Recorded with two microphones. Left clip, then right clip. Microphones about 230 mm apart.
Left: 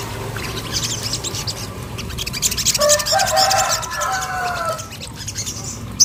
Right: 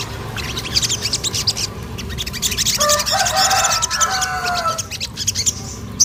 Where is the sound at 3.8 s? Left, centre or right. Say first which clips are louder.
Right 3 dB; right.